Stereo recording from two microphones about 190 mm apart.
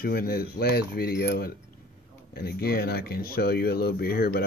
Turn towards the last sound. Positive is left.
turn(degrees=55)  # may be behind; listen again after turning